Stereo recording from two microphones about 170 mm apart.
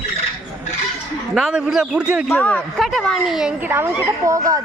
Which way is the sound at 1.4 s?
5° right (ahead or behind).